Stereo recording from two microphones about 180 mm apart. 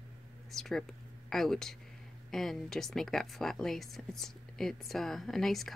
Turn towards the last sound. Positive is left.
turn(degrees=0)  # may be behind; listen again after turning